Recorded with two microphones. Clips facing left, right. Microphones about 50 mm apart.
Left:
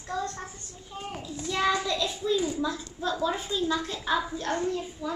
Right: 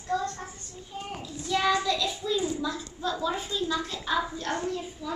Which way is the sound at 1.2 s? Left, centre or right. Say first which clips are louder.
Right 1 dB; centre.